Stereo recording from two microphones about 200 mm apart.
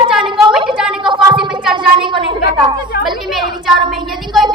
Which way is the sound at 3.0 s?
Centre (ahead or behind).